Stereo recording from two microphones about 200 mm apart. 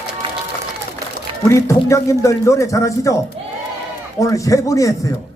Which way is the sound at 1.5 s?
15° left (ahead or behind).